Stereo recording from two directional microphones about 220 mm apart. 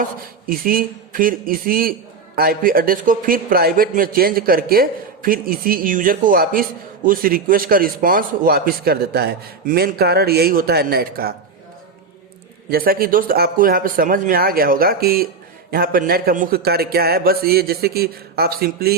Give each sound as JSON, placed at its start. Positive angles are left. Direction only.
{"t": 0.0, "sound": "speech", "side_deg": -40}
{"t": 12.7, "sound": "a man's voice", "side_deg": -40}